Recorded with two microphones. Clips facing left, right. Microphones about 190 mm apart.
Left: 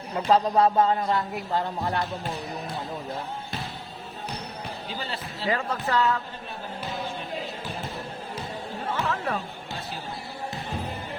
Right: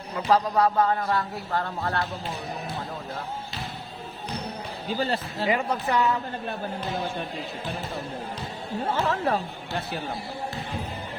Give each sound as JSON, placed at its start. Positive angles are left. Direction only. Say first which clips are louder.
{"t": 0.3, "sound": "speech", "louder": "left 1 dB", "side_deg": 25}
{"t": 4.9, "sound": "speech", "louder": "right 11 dB", "side_deg": -45}
{"t": 5.5, "sound": "speech", "louder": "right 1 dB", "side_deg": -15}
{"t": 9.0, "sound": "speech", "louder": "right 3 dB", "side_deg": -35}